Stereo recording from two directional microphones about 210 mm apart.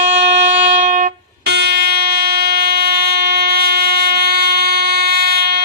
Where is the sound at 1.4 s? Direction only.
50° right (ahead or behind).